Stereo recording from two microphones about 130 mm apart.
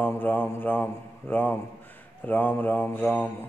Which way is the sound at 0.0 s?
15° left (ahead or behind).